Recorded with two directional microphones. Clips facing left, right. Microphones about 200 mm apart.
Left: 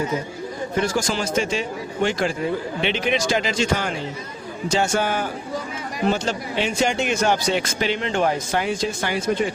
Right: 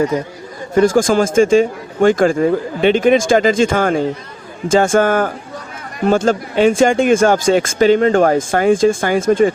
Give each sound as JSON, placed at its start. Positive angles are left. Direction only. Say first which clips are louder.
{"t": 0.8, "sound": "speech", "louder": "right 12 dB", "side_deg": -50}